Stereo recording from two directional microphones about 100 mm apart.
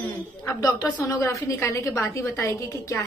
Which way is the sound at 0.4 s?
40° left (ahead or behind).